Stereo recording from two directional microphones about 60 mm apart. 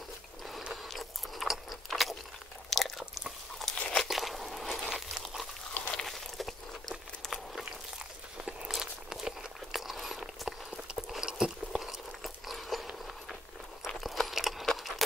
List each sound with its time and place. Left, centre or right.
0.8 s chewing: centre
3.9 s crumpling: centre
5.9 s walk: centre
8.5 s walk: centre
8.7 s walk: centre
11.0 s a sound: centre
14.8 s sewing machine: centre